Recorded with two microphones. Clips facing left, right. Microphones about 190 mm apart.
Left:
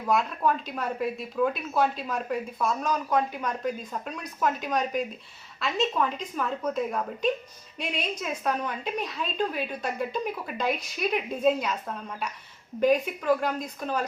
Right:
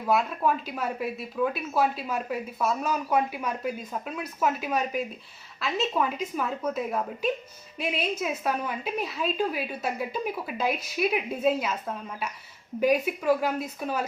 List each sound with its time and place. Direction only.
0.0 s a woman's voice: 5° right (ahead or behind)